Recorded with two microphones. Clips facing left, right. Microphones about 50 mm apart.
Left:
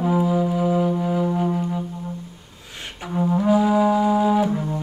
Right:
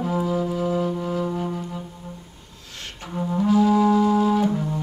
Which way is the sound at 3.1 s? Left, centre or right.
Centre.